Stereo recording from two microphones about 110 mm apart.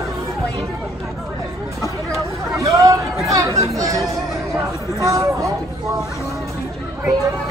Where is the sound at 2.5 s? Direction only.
30° right (ahead or behind).